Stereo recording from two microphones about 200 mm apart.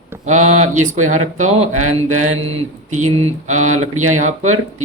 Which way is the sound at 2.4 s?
30° right (ahead or behind).